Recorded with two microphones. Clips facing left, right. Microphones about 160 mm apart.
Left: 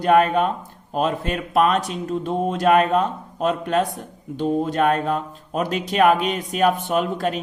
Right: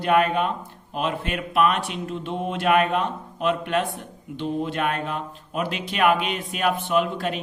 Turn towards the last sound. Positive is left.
turn(degrees=45)  # may be behind; listen again after turning